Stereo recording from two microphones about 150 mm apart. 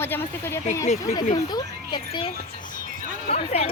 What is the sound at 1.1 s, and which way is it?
Speech, 25° left (ahead or behind).